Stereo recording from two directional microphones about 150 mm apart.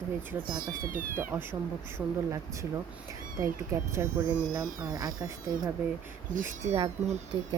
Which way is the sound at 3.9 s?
20° right (ahead or behind).